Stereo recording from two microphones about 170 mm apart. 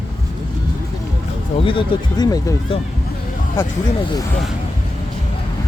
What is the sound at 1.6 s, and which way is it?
Speech, 25° left (ahead or behind).